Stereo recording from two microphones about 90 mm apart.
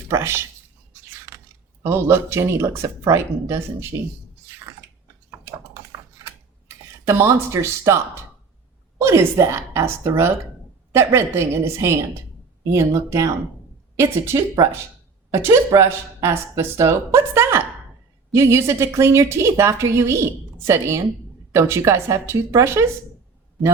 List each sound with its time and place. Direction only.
0.1 s speech: 30° right (ahead or behind)
1.8 s speech: 30° right (ahead or behind)
7.1 s a woman's voice: 30° right (ahead or behind)